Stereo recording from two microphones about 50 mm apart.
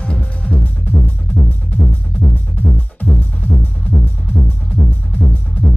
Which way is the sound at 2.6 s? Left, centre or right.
Left.